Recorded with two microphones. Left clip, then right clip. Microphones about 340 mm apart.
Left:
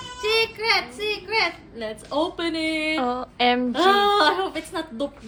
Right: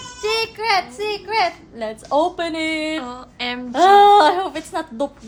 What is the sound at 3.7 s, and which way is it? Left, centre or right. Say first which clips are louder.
A child's voice: right 13 dB; right.